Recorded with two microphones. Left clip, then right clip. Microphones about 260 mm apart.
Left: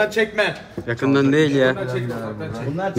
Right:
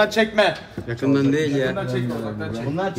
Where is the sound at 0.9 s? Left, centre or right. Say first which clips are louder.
Left 2 dB; centre.